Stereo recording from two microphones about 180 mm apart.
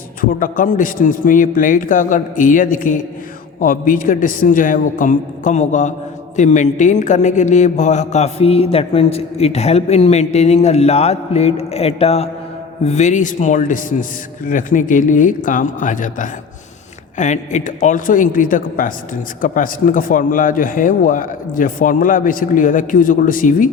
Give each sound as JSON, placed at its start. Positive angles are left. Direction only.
{"t": 0.2, "sound": "speech", "side_deg": 50}